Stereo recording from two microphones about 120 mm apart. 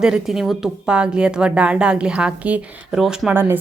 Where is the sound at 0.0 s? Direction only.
5° right (ahead or behind).